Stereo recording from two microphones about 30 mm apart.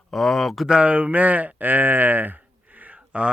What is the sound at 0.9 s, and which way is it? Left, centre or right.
Speech, right.